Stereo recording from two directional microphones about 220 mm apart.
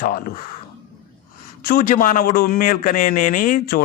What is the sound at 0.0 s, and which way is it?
Speech, 40° left (ahead or behind).